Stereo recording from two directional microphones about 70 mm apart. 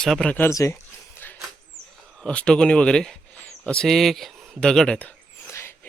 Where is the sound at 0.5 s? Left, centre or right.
Left.